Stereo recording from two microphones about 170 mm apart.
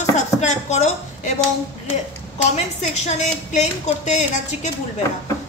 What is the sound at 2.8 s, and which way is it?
A woman's voice, 40° left (ahead or behind).